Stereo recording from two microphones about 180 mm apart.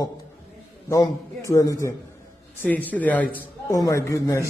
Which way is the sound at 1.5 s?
15° left (ahead or behind).